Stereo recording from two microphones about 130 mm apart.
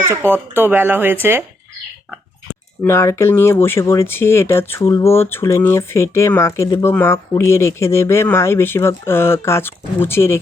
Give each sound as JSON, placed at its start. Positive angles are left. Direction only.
{"t": 0.1, "sound": "speech", "side_deg": -20}
{"t": 2.8, "sound": "speech", "side_deg": 20}